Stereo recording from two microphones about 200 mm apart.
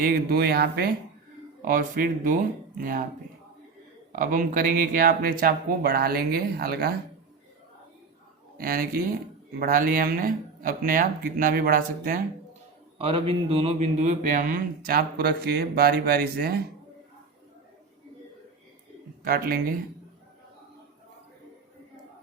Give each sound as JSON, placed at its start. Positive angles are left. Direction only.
{"t": 0.0, "sound": "speech", "side_deg": -50}
{"t": 4.1, "sound": "speech", "side_deg": -45}
{"t": 8.5, "sound": "speech", "side_deg": -50}
{"t": 13.0, "sound": "speech", "side_deg": -30}
{"t": 19.2, "sound": "speech", "side_deg": -45}